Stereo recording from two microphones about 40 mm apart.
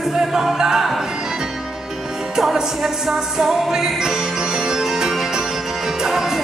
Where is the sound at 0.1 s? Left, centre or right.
Centre.